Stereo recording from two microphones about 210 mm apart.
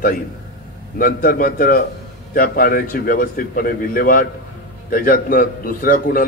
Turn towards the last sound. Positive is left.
turn(degrees=45)  # may be behind; listen again after turning